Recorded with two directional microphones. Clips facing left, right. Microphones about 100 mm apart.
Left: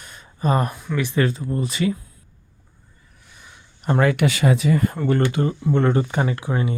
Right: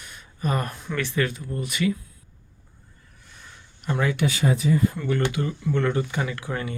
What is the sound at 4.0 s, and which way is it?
Speech, 60° left (ahead or behind).